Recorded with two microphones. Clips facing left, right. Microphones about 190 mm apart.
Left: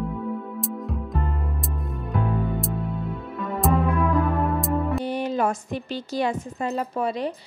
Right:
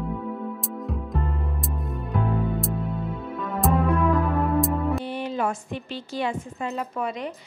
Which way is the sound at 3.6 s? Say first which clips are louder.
Even; centre (ahead or behind).